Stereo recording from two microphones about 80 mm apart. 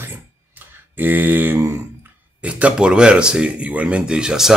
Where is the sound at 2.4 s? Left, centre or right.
Centre.